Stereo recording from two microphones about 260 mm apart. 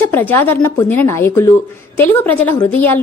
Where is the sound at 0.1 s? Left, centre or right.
Centre.